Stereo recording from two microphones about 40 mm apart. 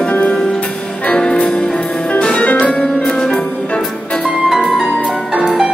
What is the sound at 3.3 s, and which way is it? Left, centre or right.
Music, left.